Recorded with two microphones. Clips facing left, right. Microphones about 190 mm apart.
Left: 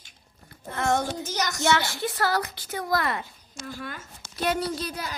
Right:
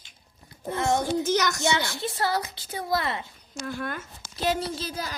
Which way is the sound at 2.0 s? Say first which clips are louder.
Left 1 dB; 25° right (ahead or behind).